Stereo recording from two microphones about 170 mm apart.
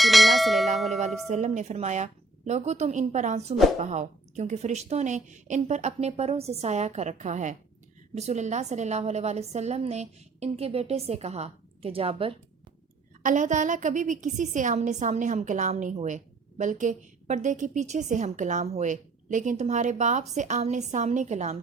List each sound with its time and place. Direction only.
0.0 s bell: centre (ahead or behind)
1.3 s a woman's voice: 45° right (ahead or behind)
13.2 s a woman's voice: 45° right (ahead or behind)